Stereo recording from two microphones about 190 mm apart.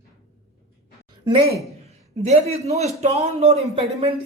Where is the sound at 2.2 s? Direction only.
35° right (ahead or behind).